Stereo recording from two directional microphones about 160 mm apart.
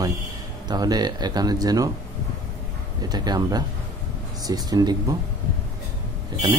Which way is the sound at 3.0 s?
25° right (ahead or behind).